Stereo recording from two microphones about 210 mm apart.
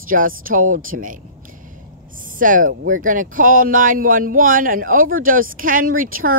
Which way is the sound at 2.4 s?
40° right (ahead or behind).